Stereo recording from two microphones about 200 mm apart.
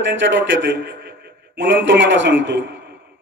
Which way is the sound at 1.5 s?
65° right (ahead or behind).